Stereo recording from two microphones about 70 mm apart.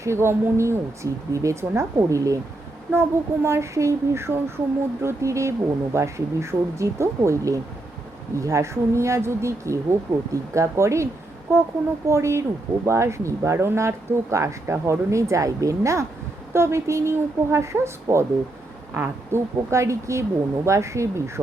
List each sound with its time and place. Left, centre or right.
0.0 s speech: right
2.9 s a woman's voice: right